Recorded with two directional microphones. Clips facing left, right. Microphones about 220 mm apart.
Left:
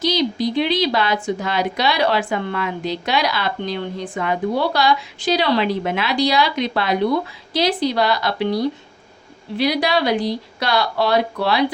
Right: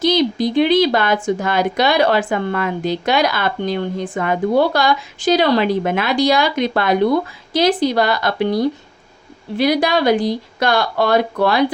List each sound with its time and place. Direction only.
0.0 s speech: 50° right (ahead or behind)
9.6 s speech: 50° right (ahead or behind)